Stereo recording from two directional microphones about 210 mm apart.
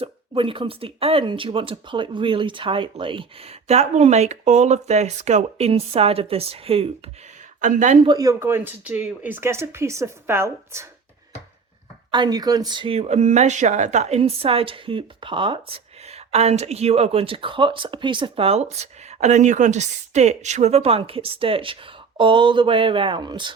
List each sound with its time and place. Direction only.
0.0 s speech: 25° right (ahead or behind)
8.0 s speech: 15° right (ahead or behind)
12.1 s speech: 20° right (ahead or behind)